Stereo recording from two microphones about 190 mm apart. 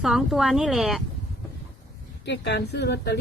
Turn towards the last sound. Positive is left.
turn(degrees=65)  # may be behind; listen again after turning